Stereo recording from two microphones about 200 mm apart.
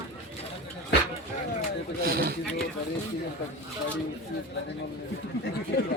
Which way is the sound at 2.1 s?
50° right (ahead or behind).